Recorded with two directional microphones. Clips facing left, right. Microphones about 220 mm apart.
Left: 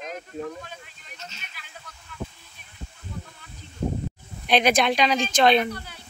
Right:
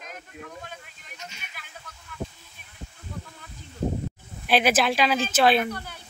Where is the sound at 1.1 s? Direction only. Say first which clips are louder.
Even; 15° right (ahead or behind).